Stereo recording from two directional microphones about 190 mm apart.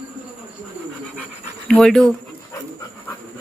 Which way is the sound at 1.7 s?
5° left (ahead or behind).